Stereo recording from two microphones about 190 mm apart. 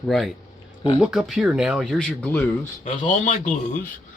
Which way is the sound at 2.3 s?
10° left (ahead or behind).